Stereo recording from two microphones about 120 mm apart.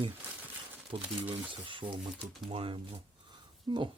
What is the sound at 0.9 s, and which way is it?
Speech, 50° right (ahead or behind).